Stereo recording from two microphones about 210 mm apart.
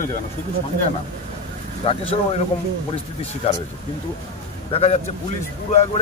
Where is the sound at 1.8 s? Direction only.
30° left (ahead or behind).